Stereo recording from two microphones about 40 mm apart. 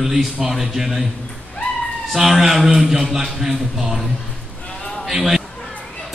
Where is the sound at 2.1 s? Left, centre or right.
Centre.